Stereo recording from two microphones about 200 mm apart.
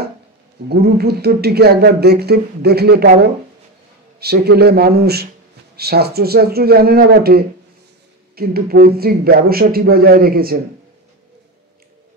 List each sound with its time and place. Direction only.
0.7 s speech: 55° right (ahead or behind)